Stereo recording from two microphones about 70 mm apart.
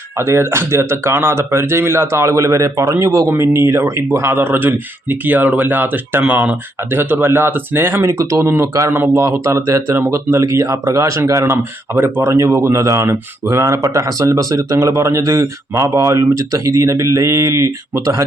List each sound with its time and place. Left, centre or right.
0.2 s speech: right
4.4 s speech: right
11.5 s speech: right